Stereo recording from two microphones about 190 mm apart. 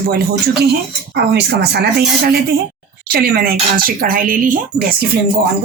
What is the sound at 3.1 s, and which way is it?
Speech, 55° right (ahead or behind).